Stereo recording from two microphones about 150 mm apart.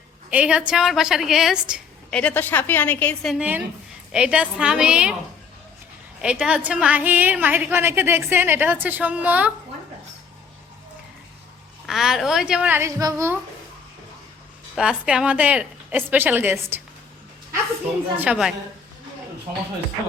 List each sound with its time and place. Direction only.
0.3 s a woman's voice: 10° right (ahead or behind)
2.0 s a woman's voice: 10° left (ahead or behind)
3.3 s a woman's voice: 10° right (ahead or behind)
6.2 s a woman's voice: 5° right (ahead or behind)
11.9 s a woman's voice: centre (ahead or behind)
13.0 s a woman's voice: 20° right (ahead or behind)
14.8 s a woman's voice: 5° right (ahead or behind)
18.2 s a woman's voice: 5° right (ahead or behind)